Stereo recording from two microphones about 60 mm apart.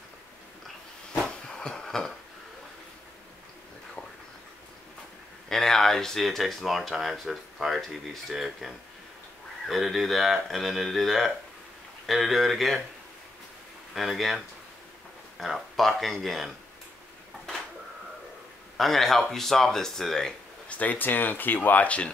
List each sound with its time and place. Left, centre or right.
1.1 s a sound: centre
5.5 s speech: centre
13.9 s speech: centre
18.8 s speech: centre
20.6 s speech: left